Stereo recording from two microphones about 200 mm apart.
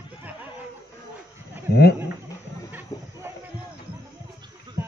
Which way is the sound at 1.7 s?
55° left (ahead or behind).